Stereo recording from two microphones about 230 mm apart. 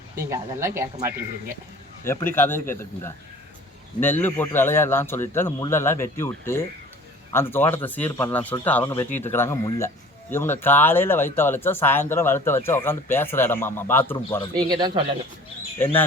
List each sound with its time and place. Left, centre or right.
0.2 s speech: centre
0.9 s speech: right
2.0 s speech: centre
14.5 s a man's voice: centre
15.8 s speech: centre